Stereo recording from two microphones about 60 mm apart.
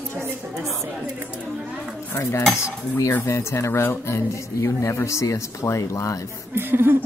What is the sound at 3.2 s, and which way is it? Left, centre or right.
Speech, left.